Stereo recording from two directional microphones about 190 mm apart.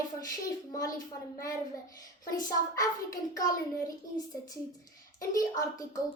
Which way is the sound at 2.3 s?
20° left (ahead or behind).